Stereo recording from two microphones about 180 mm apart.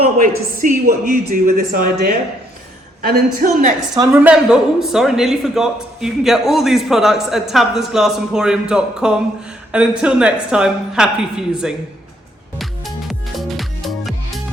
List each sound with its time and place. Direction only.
0.2 s a man's voice: 50° right (ahead or behind)
3.3 s speech: 50° right (ahead or behind)
3.9 s speech: 15° right (ahead or behind)
12.5 s music: centre (ahead or behind)